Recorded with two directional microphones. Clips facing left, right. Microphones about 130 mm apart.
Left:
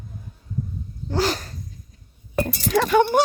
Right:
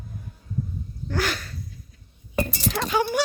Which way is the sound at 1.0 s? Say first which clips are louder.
Left 4 dB; 30° left (ahead or behind).